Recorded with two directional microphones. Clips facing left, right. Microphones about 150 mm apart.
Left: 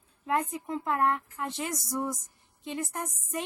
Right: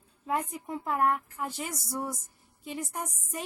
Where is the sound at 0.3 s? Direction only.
5° right (ahead or behind).